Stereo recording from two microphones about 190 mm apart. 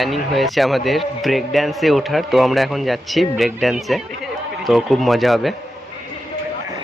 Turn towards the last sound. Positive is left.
turn(degrees=0)  # may be behind; listen again after turning